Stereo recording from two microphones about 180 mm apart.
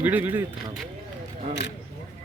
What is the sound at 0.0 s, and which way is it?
Speech, 10° right (ahead or behind).